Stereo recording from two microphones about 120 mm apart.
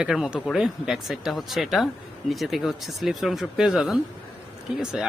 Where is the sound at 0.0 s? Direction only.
5° right (ahead or behind).